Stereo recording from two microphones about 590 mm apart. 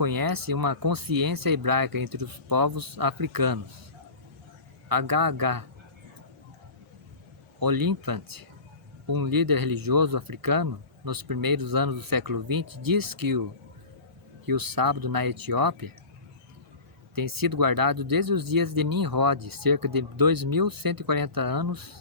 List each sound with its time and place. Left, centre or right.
0.0 s speech: right
4.9 s speech: right
7.6 s speech: right
14.4 s speech: right
17.2 s speech: right